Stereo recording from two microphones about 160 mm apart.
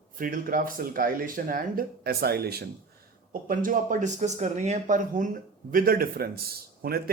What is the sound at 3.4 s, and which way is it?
Speech, 60° right (ahead or behind).